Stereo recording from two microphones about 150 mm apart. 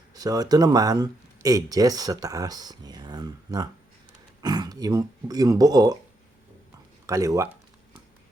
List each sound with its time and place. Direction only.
0.1 s speech: 25° right (ahead or behind)
7.1 s speech: 20° right (ahead or behind)